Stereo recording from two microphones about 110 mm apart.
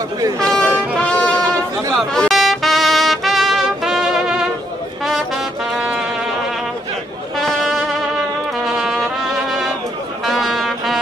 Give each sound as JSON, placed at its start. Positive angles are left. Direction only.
{"t": 0.4, "sound": "brass instrument", "side_deg": 5}
{"t": 1.4, "sound": "chatter", "side_deg": -25}
{"t": 2.0, "sound": "trumpet", "side_deg": 0}
{"t": 5.0, "sound": "brass instrument", "side_deg": 0}
{"t": 7.3, "sound": "brass instrument", "side_deg": 0}
{"t": 8.6, "sound": "trumpet", "side_deg": -5}
{"t": 10.2, "sound": "music", "side_deg": 0}